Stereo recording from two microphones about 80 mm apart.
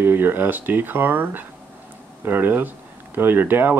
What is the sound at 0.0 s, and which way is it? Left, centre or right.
Speech, right.